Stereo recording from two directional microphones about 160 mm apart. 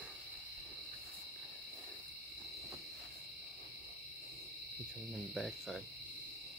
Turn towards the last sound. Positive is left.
turn(degrees=0)  # may be behind; listen again after turning